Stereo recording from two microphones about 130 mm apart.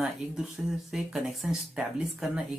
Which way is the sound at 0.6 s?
10° right (ahead or behind).